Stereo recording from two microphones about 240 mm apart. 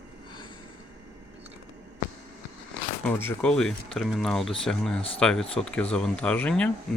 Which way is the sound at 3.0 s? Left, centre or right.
Centre.